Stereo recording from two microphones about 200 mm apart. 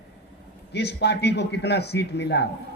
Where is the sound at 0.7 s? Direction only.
55° left (ahead or behind).